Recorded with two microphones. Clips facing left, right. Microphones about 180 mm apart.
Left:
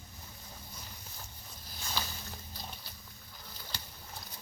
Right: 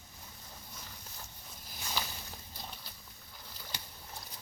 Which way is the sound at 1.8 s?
10° right (ahead or behind).